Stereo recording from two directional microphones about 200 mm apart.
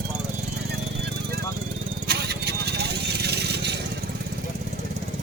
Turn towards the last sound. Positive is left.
turn(degrees=-55)  # may be behind; listen again after turning